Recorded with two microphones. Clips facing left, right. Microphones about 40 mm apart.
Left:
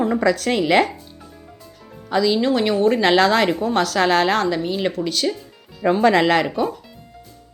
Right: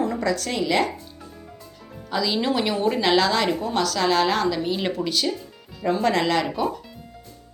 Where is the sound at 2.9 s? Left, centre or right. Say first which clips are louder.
Left 4 dB; centre.